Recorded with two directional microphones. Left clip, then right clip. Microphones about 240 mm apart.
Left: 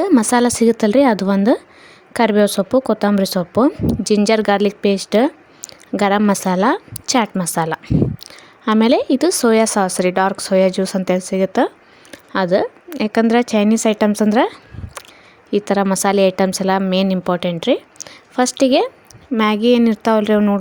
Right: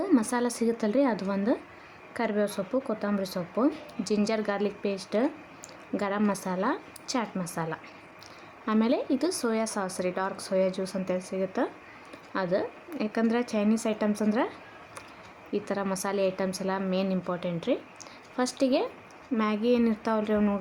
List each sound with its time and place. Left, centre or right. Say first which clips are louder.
0.0 s a woman's voice: left 12 dB; left